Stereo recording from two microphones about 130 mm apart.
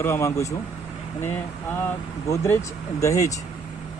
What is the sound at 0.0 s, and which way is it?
Speech, 20° left (ahead or behind).